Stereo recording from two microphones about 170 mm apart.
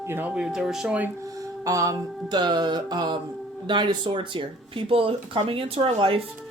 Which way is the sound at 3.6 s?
25° right (ahead or behind).